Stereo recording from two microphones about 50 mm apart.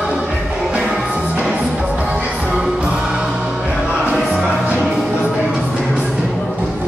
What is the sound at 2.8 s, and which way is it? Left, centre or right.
Music, centre.